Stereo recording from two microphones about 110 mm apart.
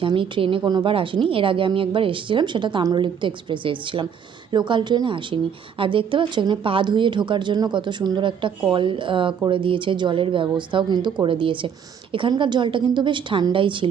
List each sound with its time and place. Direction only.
0.0 s speech: 50° right (ahead or behind)
0.6 s speech: 40° right (ahead or behind)
0.9 s speech: 50° right (ahead or behind)